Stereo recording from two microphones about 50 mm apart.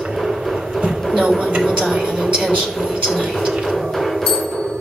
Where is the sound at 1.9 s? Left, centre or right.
Centre.